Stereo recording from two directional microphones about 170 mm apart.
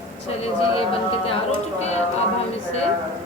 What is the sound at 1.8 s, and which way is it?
Speech, 40° left (ahead or behind).